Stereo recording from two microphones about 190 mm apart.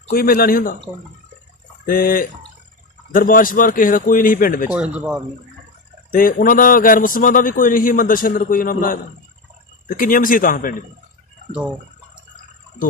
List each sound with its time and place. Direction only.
0.1 s a man's voice: 50° left (ahead or behind)
1.9 s a man's voice: 50° left (ahead or behind)
4.7 s a man's voice: 5° right (ahead or behind)
6.1 s a man's voice: 50° left (ahead or behind)